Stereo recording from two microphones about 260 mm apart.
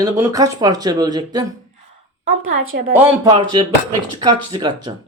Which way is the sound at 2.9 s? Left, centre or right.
Centre.